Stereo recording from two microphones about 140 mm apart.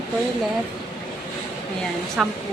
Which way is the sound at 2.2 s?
Centre (ahead or behind).